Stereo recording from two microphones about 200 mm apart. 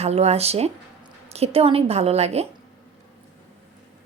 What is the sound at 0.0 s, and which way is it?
A woman's voice, 30° right (ahead or behind).